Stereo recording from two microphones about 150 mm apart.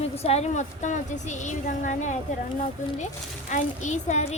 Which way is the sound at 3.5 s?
55° left (ahead or behind).